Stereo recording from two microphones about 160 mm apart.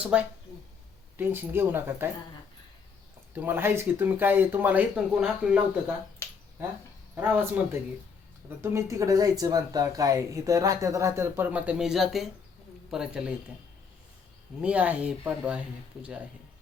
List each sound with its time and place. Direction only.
0.0 s speech: 5° right (ahead or behind)
3.3 s speech: 15° right (ahead or behind)
6.2 s finger snapping: 15° left (ahead or behind)
7.2 s speech: 10° right (ahead or behind)
14.6 s speech: 10° right (ahead or behind)